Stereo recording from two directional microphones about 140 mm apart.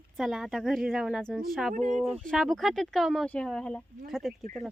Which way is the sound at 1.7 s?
60° right (ahead or behind).